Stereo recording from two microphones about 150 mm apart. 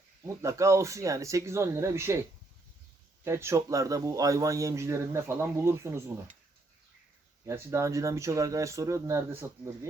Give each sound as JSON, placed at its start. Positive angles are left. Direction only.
{"t": 0.4, "sound": "speech", "side_deg": -20}
{"t": 3.2, "sound": "speech", "side_deg": -20}
{"t": 7.4, "sound": "speech", "side_deg": -20}